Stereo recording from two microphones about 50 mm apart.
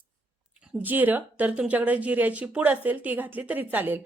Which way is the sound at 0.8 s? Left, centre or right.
Right.